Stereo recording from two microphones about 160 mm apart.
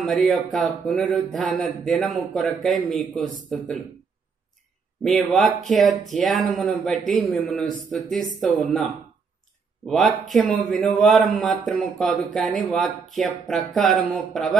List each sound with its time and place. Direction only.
0.0 s speech: centre (ahead or behind)
5.0 s speech: centre (ahead or behind)
9.8 s speech: centre (ahead or behind)